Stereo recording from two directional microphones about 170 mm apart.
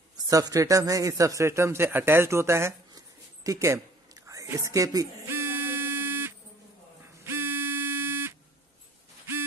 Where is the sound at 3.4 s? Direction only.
20° right (ahead or behind).